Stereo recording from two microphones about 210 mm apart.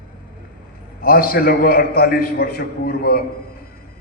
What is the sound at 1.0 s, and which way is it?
A man's voice, 45° left (ahead or behind).